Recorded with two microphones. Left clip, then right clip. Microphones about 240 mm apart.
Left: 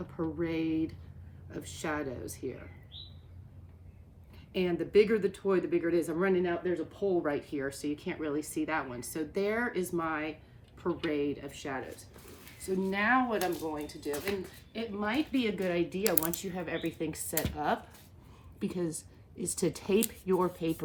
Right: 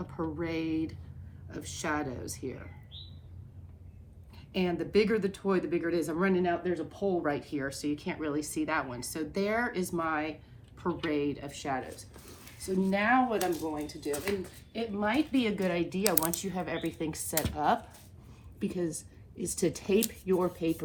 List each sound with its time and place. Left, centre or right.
0.0 s speech: centre
4.5 s speech: centre
10.8 s a woman's voice: right
11.1 s speech: centre
18.6 s speech: centre